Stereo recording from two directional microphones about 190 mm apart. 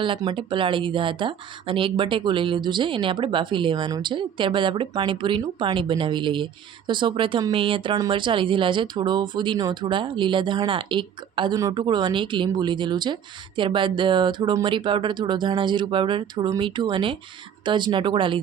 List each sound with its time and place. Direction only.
0.0 s speech: 25° right (ahead or behind)